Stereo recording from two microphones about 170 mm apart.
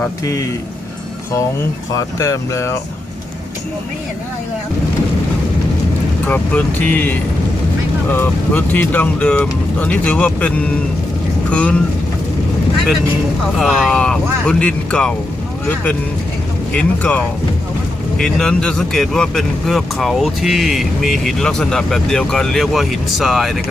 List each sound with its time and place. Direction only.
2.1 s speech: 15° left (ahead or behind)
6.2 s speech: 10° left (ahead or behind)
13.6 s speech: centre (ahead or behind)